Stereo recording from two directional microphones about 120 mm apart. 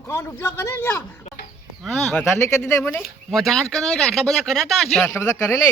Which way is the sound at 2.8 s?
20° left (ahead or behind).